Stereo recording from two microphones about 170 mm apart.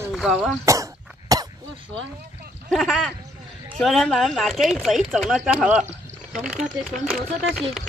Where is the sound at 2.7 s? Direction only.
5° left (ahead or behind).